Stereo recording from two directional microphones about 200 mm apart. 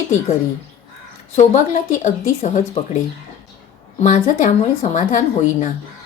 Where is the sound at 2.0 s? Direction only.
35° left (ahead or behind).